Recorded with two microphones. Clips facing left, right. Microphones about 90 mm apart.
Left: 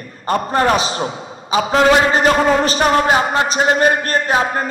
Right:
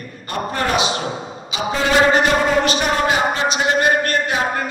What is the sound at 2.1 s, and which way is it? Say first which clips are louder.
A man's voice: left 2 dB; 35° left (ahead or behind).